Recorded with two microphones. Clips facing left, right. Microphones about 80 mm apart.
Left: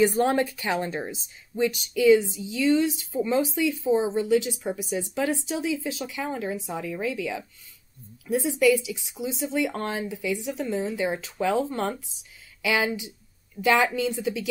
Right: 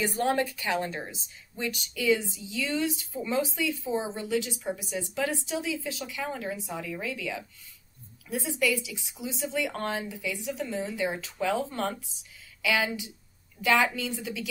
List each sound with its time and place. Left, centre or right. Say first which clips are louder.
0.0 s speech: left 5 dB; left